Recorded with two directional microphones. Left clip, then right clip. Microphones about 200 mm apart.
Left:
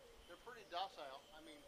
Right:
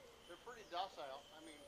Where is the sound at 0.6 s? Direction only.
50° left (ahead or behind).